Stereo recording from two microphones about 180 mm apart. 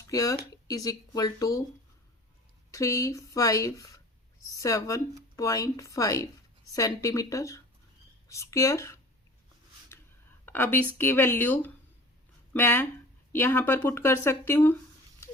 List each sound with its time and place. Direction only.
0.0 s speech: 20° left (ahead or behind)
2.7 s speech: 20° left (ahead or behind)
9.9 s a sound: 15° left (ahead or behind)
10.4 s speech: 10° left (ahead or behind)